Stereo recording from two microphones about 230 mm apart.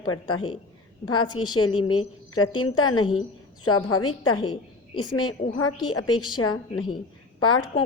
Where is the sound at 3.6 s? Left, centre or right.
Left.